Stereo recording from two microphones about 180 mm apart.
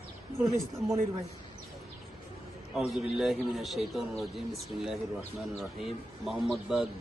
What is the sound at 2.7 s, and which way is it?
A man's voice, centre (ahead or behind).